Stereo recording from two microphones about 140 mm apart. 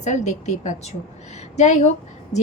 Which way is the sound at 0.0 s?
55° left (ahead or behind).